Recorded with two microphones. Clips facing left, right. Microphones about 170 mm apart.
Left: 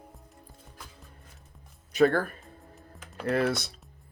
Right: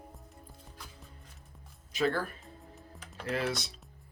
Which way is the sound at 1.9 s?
55° left (ahead or behind).